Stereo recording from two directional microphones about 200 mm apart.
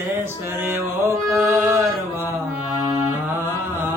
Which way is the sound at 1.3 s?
10° right (ahead or behind).